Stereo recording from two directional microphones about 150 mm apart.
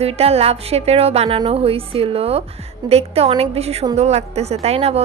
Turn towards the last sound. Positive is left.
turn(degrees=-45)  # may be behind; listen again after turning